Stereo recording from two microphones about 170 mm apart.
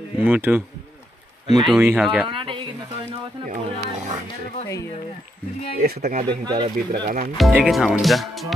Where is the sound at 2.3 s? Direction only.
30° right (ahead or behind).